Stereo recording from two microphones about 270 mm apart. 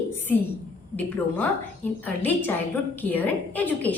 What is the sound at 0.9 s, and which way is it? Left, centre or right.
A woman's voice, centre.